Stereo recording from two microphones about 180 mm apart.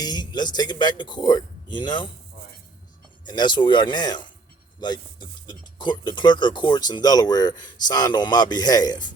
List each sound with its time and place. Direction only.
0.0 s speech: 20° left (ahead or behind)
3.2 s speech: 25° left (ahead or behind)